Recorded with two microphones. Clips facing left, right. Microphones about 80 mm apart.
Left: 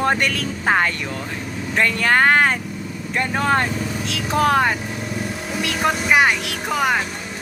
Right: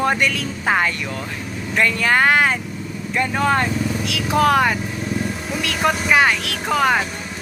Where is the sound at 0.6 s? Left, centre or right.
Left.